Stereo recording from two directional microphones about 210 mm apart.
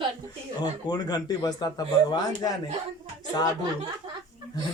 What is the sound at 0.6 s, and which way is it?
Speech, 20° left (ahead or behind).